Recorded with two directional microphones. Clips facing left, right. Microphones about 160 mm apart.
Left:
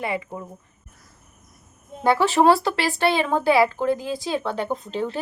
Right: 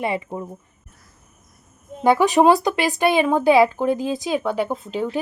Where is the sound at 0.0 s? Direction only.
25° right (ahead or behind).